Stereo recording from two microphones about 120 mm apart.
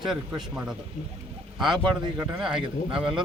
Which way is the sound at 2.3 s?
5° right (ahead or behind).